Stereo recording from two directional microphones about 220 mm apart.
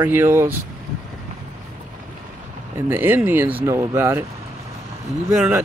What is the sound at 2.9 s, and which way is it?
Speech, 10° right (ahead or behind).